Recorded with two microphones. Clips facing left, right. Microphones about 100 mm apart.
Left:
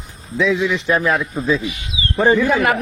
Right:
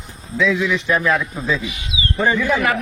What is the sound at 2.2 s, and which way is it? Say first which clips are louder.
Speech: left 3 dB; 35° left (ahead or behind).